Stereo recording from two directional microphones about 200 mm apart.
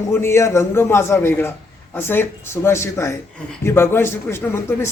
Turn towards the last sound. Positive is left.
turn(degrees=10)  # may be behind; listen again after turning